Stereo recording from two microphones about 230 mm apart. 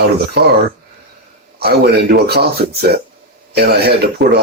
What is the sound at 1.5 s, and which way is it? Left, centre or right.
Speech, right.